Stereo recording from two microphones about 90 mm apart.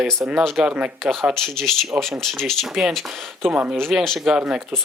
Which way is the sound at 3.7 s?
5° left (ahead or behind).